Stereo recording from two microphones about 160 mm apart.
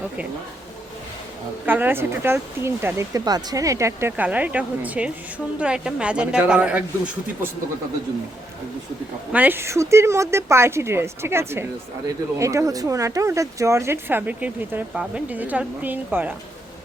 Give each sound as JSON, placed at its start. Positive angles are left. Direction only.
{"t": 1.6, "sound": "speech", "side_deg": -10}
{"t": 9.3, "sound": "speech", "side_deg": -10}